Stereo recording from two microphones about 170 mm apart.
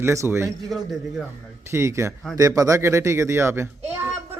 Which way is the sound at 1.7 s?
15° right (ahead or behind).